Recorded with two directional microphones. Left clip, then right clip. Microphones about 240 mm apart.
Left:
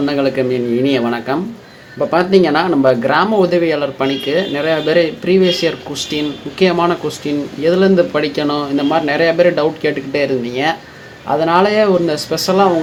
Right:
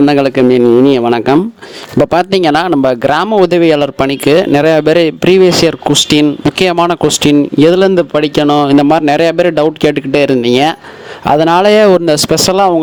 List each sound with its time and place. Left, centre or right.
0.0 s speech: right